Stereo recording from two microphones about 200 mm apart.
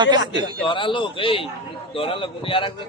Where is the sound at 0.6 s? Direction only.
25° left (ahead or behind).